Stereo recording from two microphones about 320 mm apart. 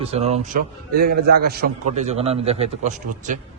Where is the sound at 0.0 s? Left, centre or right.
Centre.